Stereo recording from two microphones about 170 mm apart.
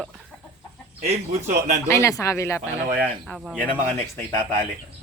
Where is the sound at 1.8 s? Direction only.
15° left (ahead or behind).